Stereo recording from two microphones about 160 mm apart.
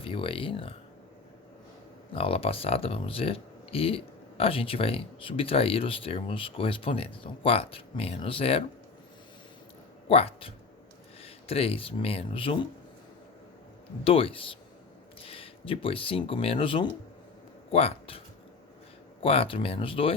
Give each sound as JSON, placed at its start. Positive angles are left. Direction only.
{"t": 0.0, "sound": "speech", "side_deg": 35}
{"t": 2.1, "sound": "speech", "side_deg": 35}
{"t": 10.1, "sound": "speech", "side_deg": 35}
{"t": 14.0, "sound": "speech", "side_deg": 35}
{"t": 19.2, "sound": "speech", "side_deg": 35}